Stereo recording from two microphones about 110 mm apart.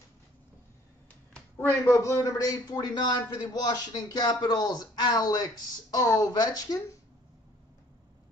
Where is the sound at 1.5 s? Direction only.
25° left (ahead or behind).